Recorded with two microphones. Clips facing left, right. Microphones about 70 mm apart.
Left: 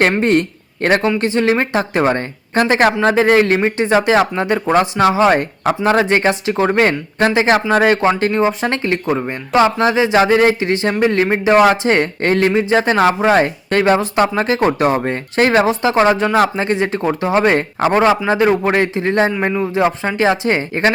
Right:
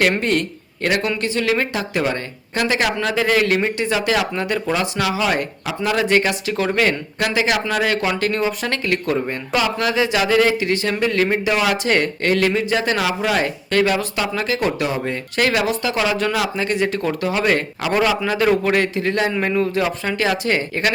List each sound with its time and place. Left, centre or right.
0.1 s speech: left